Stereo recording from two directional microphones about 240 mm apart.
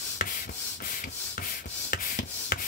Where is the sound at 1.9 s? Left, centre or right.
Left.